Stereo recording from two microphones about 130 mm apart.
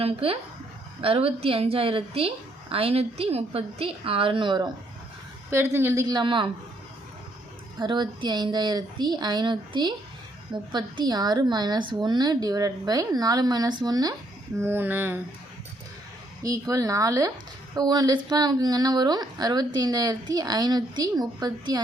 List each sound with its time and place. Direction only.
0.0 s a woman's voice: 45° right (ahead or behind)
5.7 s speech: 20° right (ahead or behind); by 6.5 s 35° right (ahead or behind)
7.8 s speech: 35° right (ahead or behind)
14.6 s speech: 15° right (ahead or behind)
16.4 s speech: 25° right (ahead or behind)